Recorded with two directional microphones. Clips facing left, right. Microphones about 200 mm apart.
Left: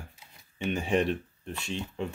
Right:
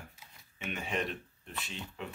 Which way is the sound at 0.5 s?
30° left (ahead or behind).